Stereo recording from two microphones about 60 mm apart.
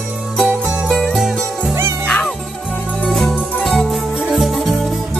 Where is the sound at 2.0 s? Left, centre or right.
Centre.